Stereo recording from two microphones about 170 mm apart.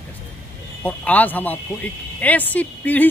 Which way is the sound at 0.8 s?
10° left (ahead or behind).